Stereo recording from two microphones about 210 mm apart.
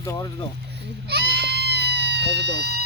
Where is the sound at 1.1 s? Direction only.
50° right (ahead or behind).